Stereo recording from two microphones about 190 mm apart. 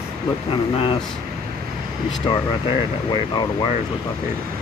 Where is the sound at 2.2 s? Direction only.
25° left (ahead or behind).